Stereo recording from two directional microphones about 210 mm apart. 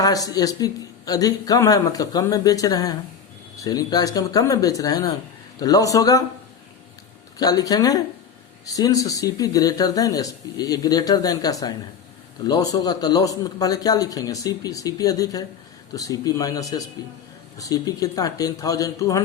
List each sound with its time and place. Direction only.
0.0 s speech: 15° left (ahead or behind)
7.3 s speech: 15° left (ahead or behind)